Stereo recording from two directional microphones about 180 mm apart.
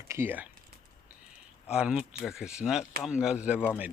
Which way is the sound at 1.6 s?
5° right (ahead or behind).